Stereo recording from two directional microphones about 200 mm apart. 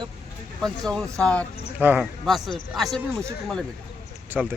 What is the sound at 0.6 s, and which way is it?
Speech, 5° left (ahead or behind).